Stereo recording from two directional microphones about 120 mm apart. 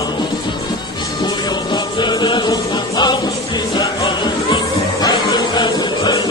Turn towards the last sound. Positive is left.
turn(degrees=35)  # may be behind; listen again after turning